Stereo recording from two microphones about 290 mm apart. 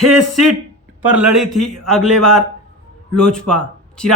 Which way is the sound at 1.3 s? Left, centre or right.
Centre.